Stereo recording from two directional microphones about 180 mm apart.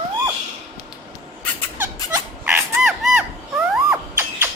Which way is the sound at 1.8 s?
10° right (ahead or behind).